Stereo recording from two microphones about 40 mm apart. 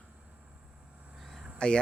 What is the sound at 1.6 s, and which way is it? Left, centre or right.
Speech, left.